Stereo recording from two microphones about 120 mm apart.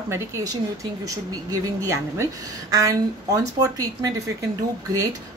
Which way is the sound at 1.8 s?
20° right (ahead or behind).